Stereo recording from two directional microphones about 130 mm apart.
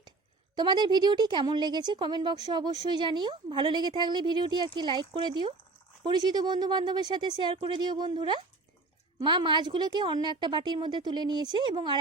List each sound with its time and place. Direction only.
0.5 s a woman's voice: 35° right (ahead or behind)